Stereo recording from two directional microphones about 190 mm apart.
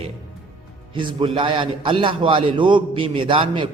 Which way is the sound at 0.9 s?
25° right (ahead or behind).